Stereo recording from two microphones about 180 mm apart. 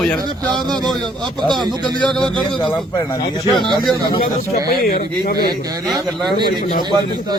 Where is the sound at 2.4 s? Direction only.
25° left (ahead or behind).